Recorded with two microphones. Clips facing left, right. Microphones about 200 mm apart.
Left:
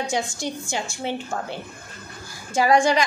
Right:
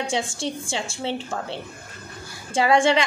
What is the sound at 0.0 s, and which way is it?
A woman's voice, 30° right (ahead or behind).